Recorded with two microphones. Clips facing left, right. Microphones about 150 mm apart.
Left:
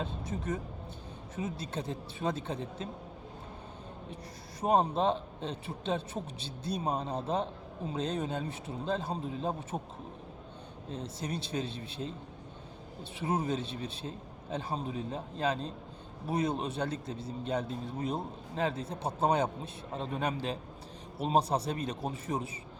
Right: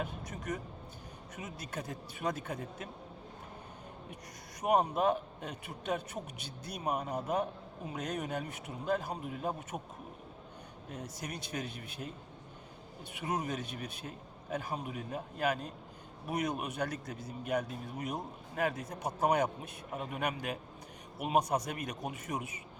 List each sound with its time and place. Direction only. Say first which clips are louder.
0.0 s a man's voice: left 3 dB; 25° left (ahead or behind)
4.6 s a man's voice: left 1 dB; 30° left (ahead or behind)
10.8 s a man's voice: left 5 dB; 25° left (ahead or behind)
13.1 s a man's voice: left 4 dB; 25° left (ahead or behind)